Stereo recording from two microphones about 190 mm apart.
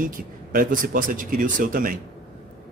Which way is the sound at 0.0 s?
45° right (ahead or behind).